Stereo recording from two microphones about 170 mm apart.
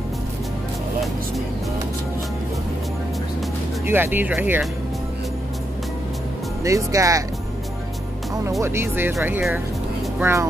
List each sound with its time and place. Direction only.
3.8 s speech: 15° right (ahead or behind)
6.6 s speech: 20° right (ahead or behind)
8.5 s speech: 15° right (ahead or behind)
10.1 s speech: 15° right (ahead or behind)